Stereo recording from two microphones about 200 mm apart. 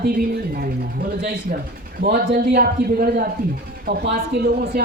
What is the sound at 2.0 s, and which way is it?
Speech, 50° right (ahead or behind).